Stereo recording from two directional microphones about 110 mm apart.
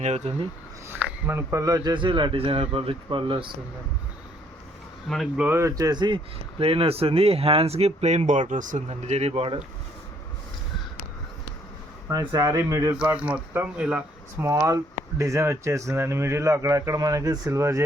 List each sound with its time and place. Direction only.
0.0 s speech: 80° right
0.9 s speech: 15° right (ahead or behind); by 3.5 s 50° right (ahead or behind)
5.0 s speech: centre (ahead or behind)
5.4 s a man's voice: 20° right (ahead or behind); by 6.1 s 40° right (ahead or behind)
6.6 s speech: 60° right (ahead or behind); by 8.4 s 90° right
8.9 s speech: 75° right (ahead or behind)
12.0 s speech: 30° right (ahead or behind)
13.1 s speech: 10° right (ahead or behind)
14.4 s a man's voice: 30° right (ahead or behind)